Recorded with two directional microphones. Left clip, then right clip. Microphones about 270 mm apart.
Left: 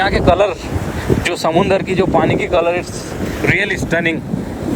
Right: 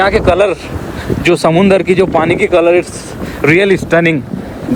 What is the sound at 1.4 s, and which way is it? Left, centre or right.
Speech, right.